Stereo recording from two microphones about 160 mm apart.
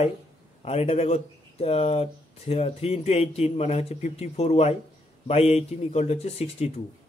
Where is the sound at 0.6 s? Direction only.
40° left (ahead or behind).